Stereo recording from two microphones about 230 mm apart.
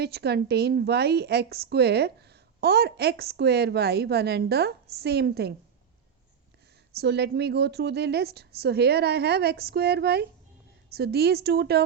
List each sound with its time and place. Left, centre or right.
0.0 s a woman's voice: right
6.9 s a woman's voice: right